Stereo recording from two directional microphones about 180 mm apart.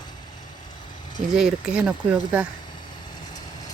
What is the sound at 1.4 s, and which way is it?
Speech, 5° right (ahead or behind).